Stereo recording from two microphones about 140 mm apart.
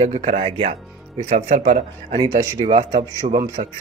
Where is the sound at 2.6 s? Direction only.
45° right (ahead or behind).